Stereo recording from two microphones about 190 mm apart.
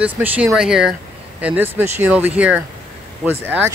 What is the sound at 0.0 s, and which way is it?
Speech, 5° right (ahead or behind).